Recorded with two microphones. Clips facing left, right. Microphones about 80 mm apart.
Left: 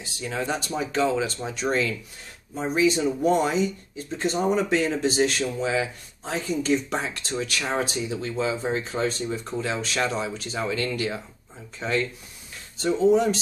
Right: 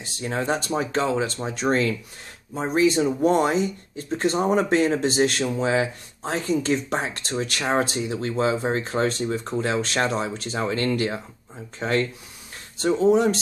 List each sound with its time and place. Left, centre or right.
0.2 s speech: right
10.0 s speech: right